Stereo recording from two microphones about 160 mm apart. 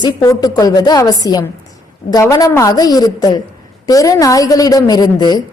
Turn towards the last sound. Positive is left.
turn(degrees=25)  # may be behind; listen again after turning